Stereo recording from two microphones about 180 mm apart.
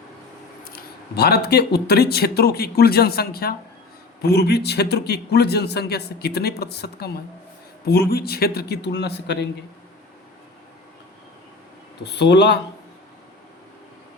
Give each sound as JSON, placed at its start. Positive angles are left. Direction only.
{"t": 0.6, "sound": "a man's voice", "side_deg": 55}
{"t": 12.0, "sound": "speech", "side_deg": 70}